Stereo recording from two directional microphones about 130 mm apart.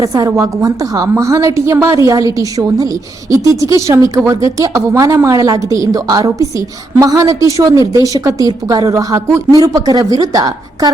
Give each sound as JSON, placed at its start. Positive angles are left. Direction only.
{"t": 0.0, "sound": "a woman's voice", "side_deg": -25}